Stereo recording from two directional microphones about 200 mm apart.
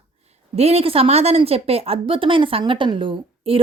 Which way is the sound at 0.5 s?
30° right (ahead or behind).